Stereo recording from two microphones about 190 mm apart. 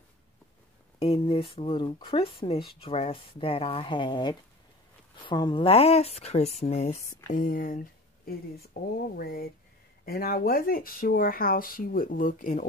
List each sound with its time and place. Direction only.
1.0 s speech: 30° left (ahead or behind)
7.3 s speech: 45° left (ahead or behind)